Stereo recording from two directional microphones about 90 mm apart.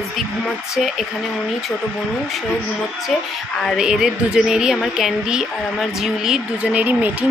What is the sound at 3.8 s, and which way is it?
A woman's voice, 5° right (ahead or behind).